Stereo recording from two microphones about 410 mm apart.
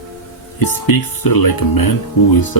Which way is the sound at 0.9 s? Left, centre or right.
Left.